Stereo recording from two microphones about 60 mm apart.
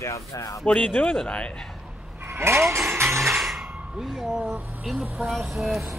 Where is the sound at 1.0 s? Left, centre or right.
Centre.